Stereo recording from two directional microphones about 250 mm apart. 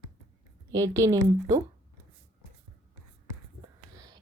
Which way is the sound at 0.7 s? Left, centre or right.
Centre.